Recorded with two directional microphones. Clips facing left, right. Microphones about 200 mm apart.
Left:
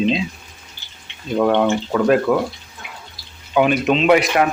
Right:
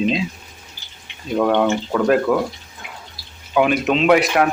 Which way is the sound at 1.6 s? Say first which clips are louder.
Left 1 dB; centre (ahead or behind).